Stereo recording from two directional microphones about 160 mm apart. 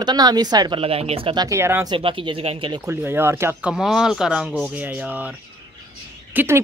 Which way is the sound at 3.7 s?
5° right (ahead or behind).